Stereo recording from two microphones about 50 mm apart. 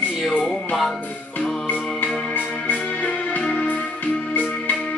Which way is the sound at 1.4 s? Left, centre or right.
Left.